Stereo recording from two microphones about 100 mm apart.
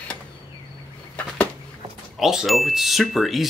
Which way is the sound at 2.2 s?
5° right (ahead or behind).